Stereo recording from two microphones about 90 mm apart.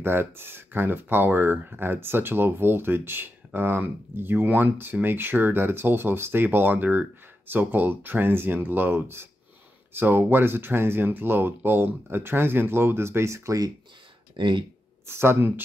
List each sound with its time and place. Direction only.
0.0 s speech: 25° right (ahead or behind)
14.3 s speech: 65° right (ahead or behind)
15.0 s speech: 25° right (ahead or behind)